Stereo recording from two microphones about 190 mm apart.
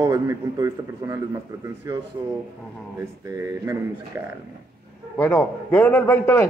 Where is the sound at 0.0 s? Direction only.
20° right (ahead or behind).